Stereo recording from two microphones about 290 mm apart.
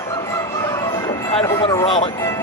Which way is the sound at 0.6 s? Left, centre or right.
Centre.